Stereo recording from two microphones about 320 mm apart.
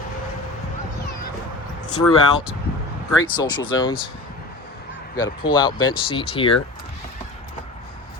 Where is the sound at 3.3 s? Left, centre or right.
Centre.